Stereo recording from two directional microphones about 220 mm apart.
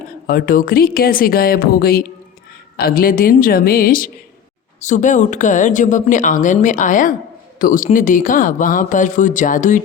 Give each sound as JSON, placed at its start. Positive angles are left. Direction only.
{"t": 0.3, "sound": "speech", "side_deg": 40}